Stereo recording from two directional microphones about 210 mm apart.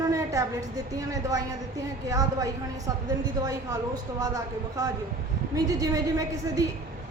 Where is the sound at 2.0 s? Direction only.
15° right (ahead or behind).